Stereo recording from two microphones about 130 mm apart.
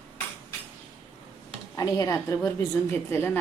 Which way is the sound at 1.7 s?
30° left (ahead or behind).